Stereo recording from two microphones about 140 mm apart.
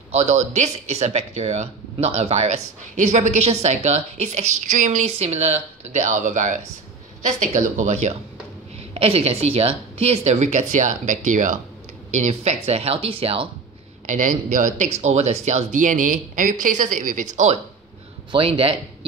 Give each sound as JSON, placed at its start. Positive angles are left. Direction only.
{"t": 0.1, "sound": "speech", "side_deg": -55}
{"t": 14.0, "sound": "speech", "side_deg": -65}
{"t": 18.3, "sound": "a man's voice", "side_deg": -40}